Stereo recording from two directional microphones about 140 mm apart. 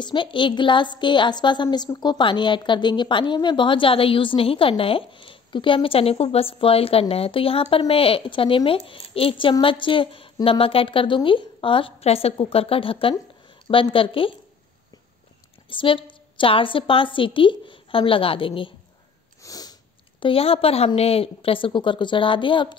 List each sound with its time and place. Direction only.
0.0 s a woman's voice: 35° left (ahead or behind)
15.7 s a woman's voice: 40° left (ahead or behind)
19.4 s sniff: 25° left (ahead or behind)
20.2 s a woman's voice: 40° left (ahead or behind)